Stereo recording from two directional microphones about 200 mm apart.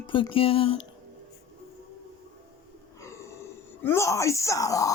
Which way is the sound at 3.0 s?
15° left (ahead or behind).